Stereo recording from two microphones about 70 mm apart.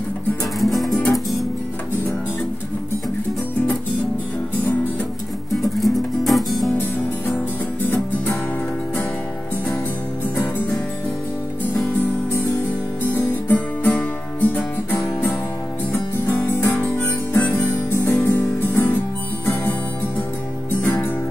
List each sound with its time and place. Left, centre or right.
0.6 s music: centre
5.5 s music: centre
6.8 s music: left
10.3 s music: left
13.0 s music: left
20.8 s music: left